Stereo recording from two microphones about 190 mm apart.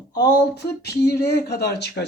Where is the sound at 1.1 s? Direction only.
60° left (ahead or behind).